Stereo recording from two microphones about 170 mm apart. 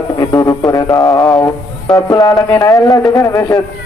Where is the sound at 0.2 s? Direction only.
20° left (ahead or behind).